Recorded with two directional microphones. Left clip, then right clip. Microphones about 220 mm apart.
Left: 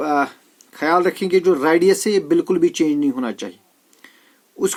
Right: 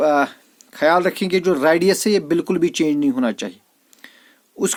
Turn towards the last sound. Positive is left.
turn(degrees=-45)  # may be behind; listen again after turning